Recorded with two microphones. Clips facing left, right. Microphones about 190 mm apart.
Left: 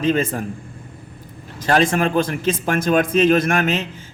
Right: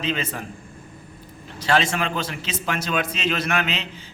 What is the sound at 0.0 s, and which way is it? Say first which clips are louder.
Speech: left 8 dB; 50° left (ahead or behind).